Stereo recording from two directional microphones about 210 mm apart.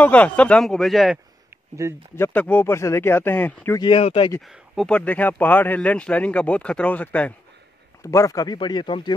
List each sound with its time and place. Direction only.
0.0 s speech: 5° left (ahead or behind)
1.8 s speech: 15° right (ahead or behind)
2.1 s speech: 10° left (ahead or behind)
3.8 s speech: 25° left (ahead or behind)
4.4 s speech: centre (ahead or behind); by 9.1 s 20° left (ahead or behind)